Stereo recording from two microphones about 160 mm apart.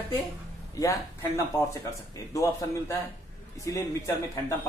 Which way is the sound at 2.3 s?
20° left (ahead or behind).